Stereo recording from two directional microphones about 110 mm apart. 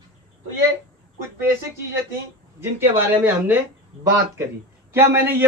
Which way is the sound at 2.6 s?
20° right (ahead or behind).